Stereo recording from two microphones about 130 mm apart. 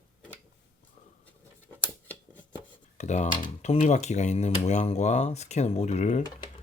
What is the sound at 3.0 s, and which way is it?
Speech, 65° left (ahead or behind).